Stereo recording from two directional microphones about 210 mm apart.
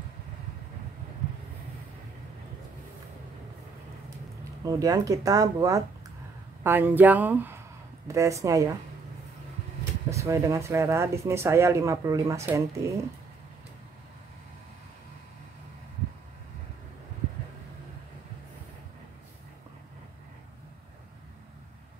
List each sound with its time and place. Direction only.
4.6 s speech: 15° right (ahead or behind)
10.0 s speech: 15° right (ahead or behind)